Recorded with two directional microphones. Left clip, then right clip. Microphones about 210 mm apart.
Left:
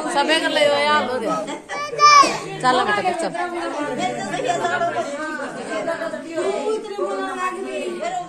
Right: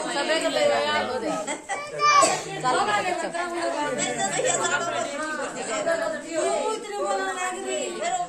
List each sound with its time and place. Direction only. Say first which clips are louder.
0.3 s speech: left 3 dB; 40° left (ahead or behind)
2.0 s children playing: left 7 dB; 50° left (ahead or behind)